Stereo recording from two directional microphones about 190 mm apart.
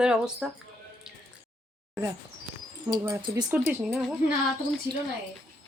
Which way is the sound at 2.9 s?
15° right (ahead or behind).